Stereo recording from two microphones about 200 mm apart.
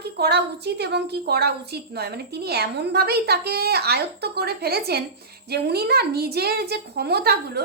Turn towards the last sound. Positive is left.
turn(degrees=-55)  # may be behind; listen again after turning